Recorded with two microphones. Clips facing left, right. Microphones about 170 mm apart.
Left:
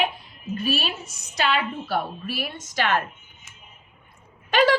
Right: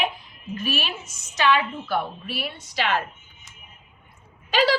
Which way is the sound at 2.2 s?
45° left (ahead or behind).